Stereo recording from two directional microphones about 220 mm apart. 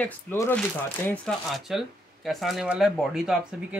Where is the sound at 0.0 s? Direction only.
10° left (ahead or behind).